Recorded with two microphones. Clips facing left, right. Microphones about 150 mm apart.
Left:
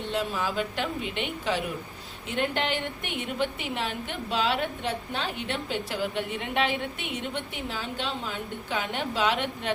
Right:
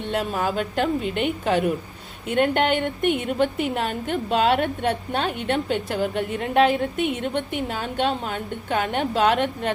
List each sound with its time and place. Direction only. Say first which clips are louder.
0.1 s a woman's voice: right 5 dB; 55° right (ahead or behind)